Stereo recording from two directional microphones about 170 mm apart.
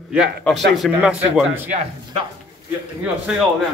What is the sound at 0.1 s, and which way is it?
A man's voice, centre (ahead or behind).